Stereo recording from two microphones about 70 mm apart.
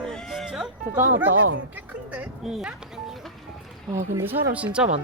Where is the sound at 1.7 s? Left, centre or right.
Right.